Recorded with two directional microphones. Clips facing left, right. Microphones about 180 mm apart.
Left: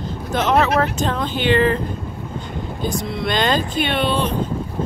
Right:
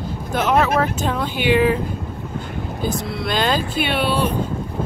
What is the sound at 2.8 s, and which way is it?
Speech, 5° right (ahead or behind).